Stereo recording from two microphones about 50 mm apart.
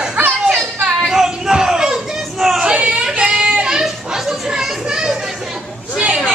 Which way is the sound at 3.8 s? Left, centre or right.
Centre.